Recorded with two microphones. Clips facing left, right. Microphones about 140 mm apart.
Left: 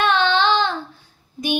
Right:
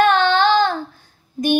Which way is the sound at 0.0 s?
45° right (ahead or behind).